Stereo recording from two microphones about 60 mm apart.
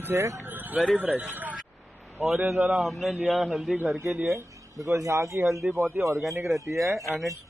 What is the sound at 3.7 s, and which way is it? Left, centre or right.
Speech, right.